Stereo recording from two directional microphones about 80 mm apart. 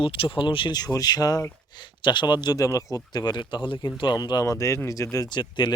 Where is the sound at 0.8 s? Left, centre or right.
Left.